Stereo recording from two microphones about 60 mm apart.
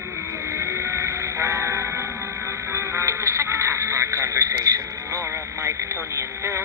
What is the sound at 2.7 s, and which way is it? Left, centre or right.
Radio, right.